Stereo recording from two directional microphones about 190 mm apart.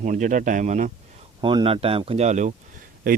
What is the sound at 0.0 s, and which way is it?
Speech, 40° right (ahead or behind).